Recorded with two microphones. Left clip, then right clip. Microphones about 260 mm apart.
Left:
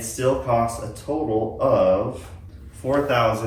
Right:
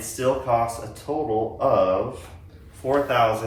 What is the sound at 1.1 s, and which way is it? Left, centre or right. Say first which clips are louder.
Speech: left 1 dB; right.